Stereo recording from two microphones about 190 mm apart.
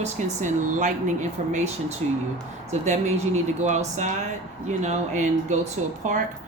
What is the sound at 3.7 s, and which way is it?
Speech, 40° right (ahead or behind).